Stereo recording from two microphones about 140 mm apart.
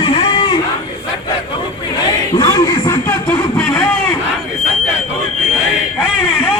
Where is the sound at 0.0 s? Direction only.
40° left (ahead or behind).